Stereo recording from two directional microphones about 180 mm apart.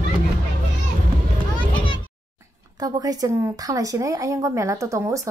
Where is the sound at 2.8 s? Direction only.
20° right (ahead or behind).